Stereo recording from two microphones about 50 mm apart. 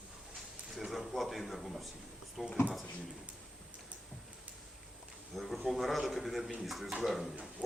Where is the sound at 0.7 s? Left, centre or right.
Centre.